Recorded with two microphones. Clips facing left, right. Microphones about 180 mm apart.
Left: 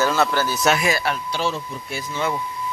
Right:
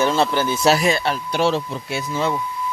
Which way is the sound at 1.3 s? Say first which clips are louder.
Right 5 dB; 70° right (ahead or behind).